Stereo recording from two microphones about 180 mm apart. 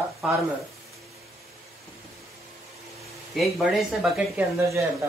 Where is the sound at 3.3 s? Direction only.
Centre (ahead or behind).